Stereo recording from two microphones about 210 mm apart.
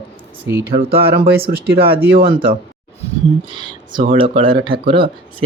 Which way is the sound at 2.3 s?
25° right (ahead or behind).